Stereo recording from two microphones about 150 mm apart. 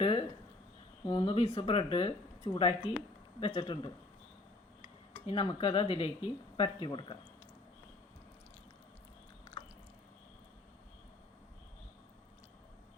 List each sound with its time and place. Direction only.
0.0 s a sound: 40° left (ahead or behind)
1.0 s speech: 35° left (ahead or behind)
5.2 s speech: 35° left (ahead or behind)